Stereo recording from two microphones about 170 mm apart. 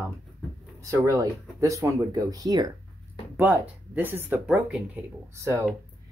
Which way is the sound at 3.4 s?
10° right (ahead or behind).